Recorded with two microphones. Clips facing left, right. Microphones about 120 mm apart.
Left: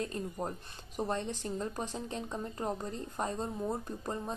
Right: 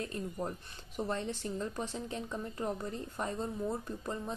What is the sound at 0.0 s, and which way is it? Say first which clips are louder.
A woman's voice: left 1 dB; 35° left (ahead or behind).